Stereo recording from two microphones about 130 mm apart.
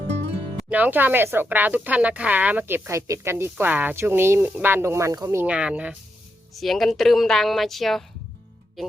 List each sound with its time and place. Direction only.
0.7 s speech: 15° right (ahead or behind)
5.5 s a woman's voice: 10° right (ahead or behind)